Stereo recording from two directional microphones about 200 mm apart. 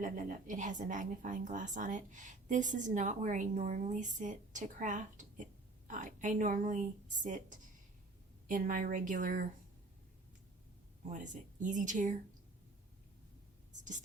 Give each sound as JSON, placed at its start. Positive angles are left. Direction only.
{"t": 0.0, "sound": "a woman's voice", "side_deg": -40}
{"t": 8.4, "sound": "a woman's voice", "side_deg": -40}
{"t": 11.1, "sound": "a woman's voice", "side_deg": -40}